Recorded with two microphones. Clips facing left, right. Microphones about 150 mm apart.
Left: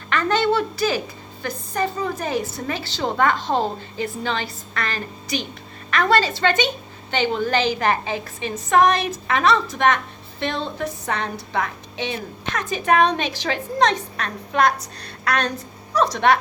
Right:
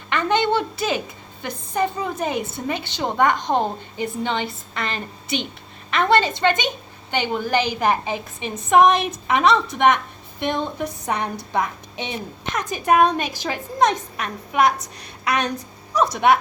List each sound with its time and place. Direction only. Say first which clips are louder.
0.1 s a woman's voice: even; 20° right (ahead or behind)